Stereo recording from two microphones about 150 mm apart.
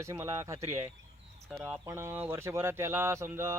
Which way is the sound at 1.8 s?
15° right (ahead or behind).